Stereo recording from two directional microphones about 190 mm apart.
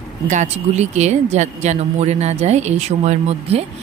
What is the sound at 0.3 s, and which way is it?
Speech, 40° right (ahead or behind).